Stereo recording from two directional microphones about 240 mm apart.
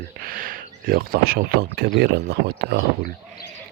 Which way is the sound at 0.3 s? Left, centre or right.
Right.